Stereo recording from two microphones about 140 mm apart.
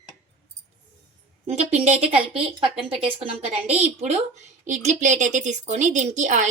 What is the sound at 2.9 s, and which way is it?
Speech, 40° right (ahead or behind).